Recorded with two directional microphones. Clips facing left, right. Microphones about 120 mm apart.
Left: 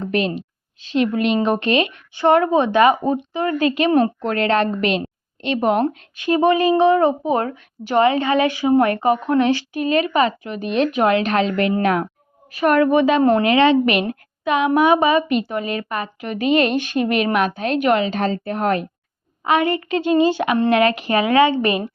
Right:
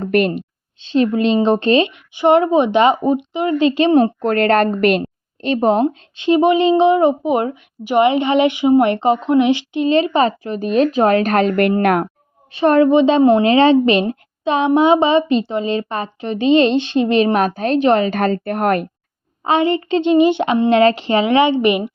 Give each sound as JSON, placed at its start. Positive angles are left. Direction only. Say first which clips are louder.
{"t": 0.0, "sound": "a woman's voice", "louder": "right 5 dB", "side_deg": -55}
{"t": 0.8, "sound": "a woman's voice", "louder": "right 3 dB", "side_deg": -30}
{"t": 1.9, "sound": "speech", "louder": "right 3 dB", "side_deg": -20}
{"t": 4.2, "sound": "a woman's voice", "louder": "right 4 dB", "side_deg": -45}
{"t": 12.5, "sound": "speech", "louder": "right 3 dB", "side_deg": -30}
{"t": 18.0, "sound": "a woman's voice", "louder": "right 4 dB", "side_deg": -55}
{"t": 19.5, "sound": "speech", "louder": "right 3 dB", "side_deg": -25}